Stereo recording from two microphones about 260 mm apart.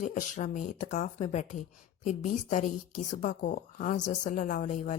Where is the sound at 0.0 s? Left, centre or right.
Left.